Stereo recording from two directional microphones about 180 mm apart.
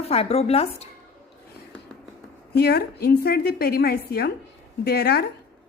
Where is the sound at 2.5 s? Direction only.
65° left (ahead or behind).